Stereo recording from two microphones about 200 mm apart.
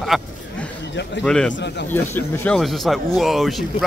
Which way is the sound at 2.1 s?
10° left (ahead or behind).